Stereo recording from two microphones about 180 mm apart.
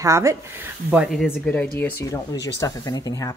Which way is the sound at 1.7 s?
15° left (ahead or behind).